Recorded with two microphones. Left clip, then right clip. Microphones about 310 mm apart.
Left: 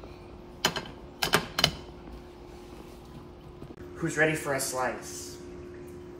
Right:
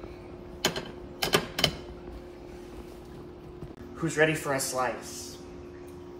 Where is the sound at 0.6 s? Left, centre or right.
Centre.